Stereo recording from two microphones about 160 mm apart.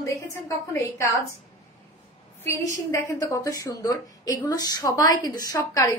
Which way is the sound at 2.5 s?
20° left (ahead or behind).